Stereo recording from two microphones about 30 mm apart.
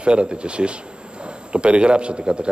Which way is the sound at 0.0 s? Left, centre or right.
Right.